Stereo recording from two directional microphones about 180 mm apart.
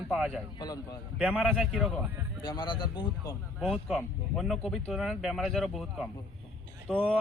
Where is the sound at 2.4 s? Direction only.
25° left (ahead or behind).